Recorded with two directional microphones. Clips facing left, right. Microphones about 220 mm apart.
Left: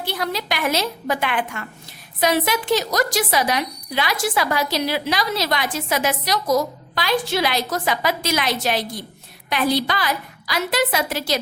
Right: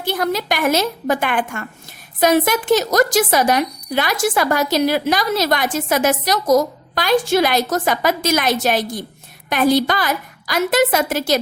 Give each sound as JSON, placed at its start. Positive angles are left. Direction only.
{"t": 0.0, "sound": "speech", "side_deg": -50}